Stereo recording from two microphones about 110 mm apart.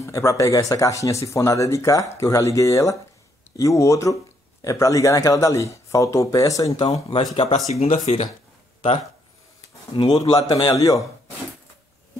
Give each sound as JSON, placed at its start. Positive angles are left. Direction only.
{"t": 0.0, "sound": "speech", "side_deg": 30}
{"t": 6.9, "sound": "speech", "side_deg": 55}
{"t": 7.6, "sound": "speech", "side_deg": 75}
{"t": 9.9, "sound": "a man's voice", "side_deg": 45}